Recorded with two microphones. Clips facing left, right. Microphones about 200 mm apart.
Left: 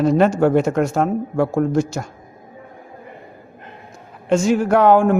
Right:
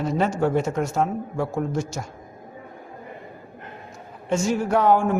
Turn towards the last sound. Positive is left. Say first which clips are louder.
# left 6 dB
turn(degrees=70)  # may be behind; listen again after turning